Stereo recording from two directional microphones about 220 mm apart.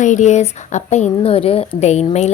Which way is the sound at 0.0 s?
35° left (ahead or behind).